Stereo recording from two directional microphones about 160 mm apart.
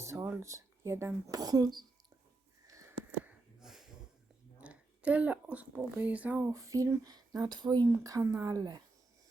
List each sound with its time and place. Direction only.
0.0 s speech: 20° right (ahead or behind)
2.6 s a sound: 20° right (ahead or behind)
3.6 s snort: 5° right (ahead or behind)
4.6 s a woman's voice: 10° right (ahead or behind)
6.5 s speech: 20° right (ahead or behind)